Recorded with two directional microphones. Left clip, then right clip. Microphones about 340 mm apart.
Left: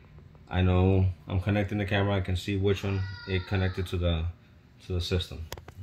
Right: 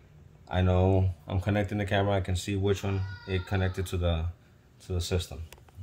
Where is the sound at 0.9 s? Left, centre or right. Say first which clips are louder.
Even; right.